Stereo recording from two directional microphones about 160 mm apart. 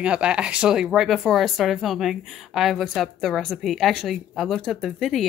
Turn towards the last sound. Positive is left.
turn(degrees=0)  # may be behind; listen again after turning